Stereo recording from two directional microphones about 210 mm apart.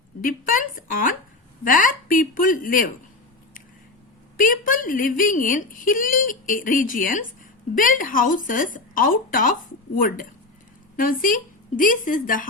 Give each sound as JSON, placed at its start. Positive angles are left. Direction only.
{"t": 0.2, "sound": "a woman's voice", "side_deg": 40}
{"t": 4.4, "sound": "a woman's voice", "side_deg": 40}